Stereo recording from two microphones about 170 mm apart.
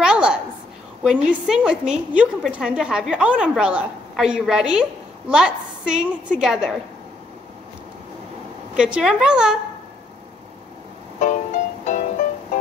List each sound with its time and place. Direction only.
0.0 s a sound: 5° right (ahead or behind)
1.0 s a woman's voice: 5° right (ahead or behind)
8.7 s a woman's voice: 5° right (ahead or behind)
11.1 s music: 45° left (ahead or behind)